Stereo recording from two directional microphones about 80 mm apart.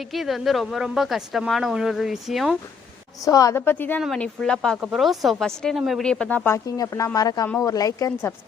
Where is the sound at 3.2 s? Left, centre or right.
Left.